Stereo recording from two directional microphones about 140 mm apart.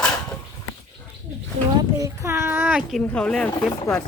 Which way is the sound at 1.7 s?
25° right (ahead or behind).